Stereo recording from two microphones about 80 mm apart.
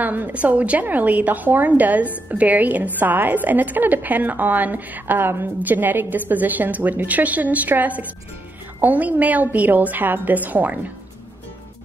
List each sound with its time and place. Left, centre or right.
0.0 s a woman's voice: right